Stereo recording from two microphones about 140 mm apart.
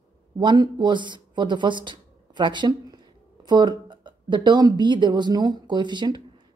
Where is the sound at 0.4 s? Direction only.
30° right (ahead or behind).